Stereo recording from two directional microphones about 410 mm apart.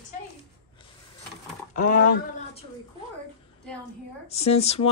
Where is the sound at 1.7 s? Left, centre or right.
Centre.